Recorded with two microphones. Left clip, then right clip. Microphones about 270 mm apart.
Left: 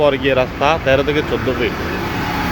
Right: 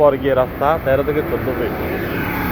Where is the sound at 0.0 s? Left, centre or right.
Left.